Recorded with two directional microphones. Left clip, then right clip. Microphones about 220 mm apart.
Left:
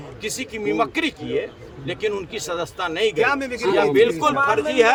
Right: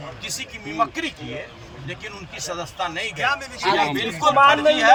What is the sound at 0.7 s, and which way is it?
Speech, 30° left (ahead or behind).